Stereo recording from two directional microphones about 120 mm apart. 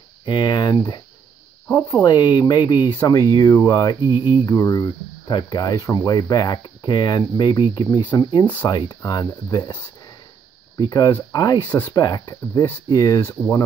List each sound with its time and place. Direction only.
0.2 s speech: 40° left (ahead or behind)
4.0 s cricket: 15° right (ahead or behind)
4.5 s speech: 30° left (ahead or behind)
10.8 s speech: 35° left (ahead or behind)